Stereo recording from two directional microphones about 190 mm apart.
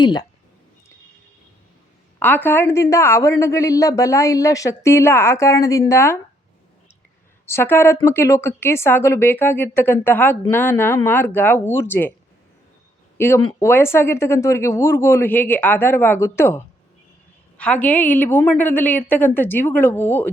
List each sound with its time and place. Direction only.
0.0 s speech: 25° left (ahead or behind)
2.1 s a woman's voice: 10° left (ahead or behind)
7.4 s a woman's voice: 15° left (ahead or behind)
13.1 s a woman's voice: 10° left (ahead or behind)